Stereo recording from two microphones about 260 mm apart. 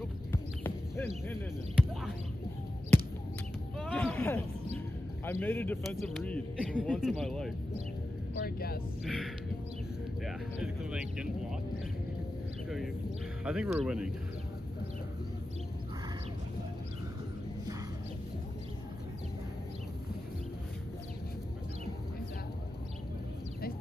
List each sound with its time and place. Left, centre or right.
0.3 s horse: centre
3.7 s a sound: centre
5.2 s a man's voice: centre
8.4 s speech: left
9.0 s speech: centre
12.6 s speech: centre